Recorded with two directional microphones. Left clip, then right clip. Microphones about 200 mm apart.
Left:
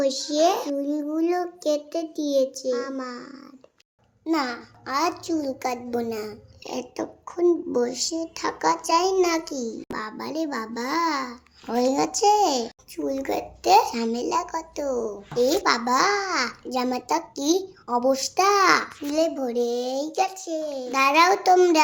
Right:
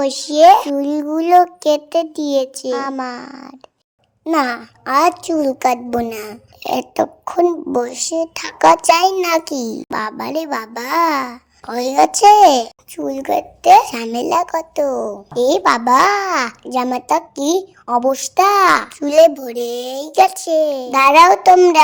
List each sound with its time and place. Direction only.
0.0 s a child's voice: 50° right (ahead or behind)